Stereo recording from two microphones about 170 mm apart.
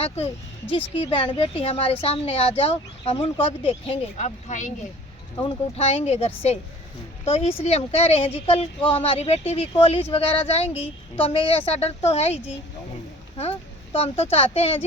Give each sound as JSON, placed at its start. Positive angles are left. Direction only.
{"t": 0.7, "sound": "speech", "side_deg": 35}
{"t": 5.4, "sound": "speech", "side_deg": 35}
{"t": 13.9, "sound": "speech", "side_deg": 35}